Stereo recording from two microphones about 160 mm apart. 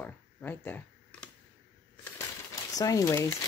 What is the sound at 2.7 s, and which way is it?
Speech, 20° left (ahead or behind).